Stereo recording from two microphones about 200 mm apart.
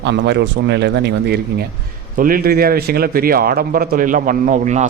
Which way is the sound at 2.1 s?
45° right (ahead or behind).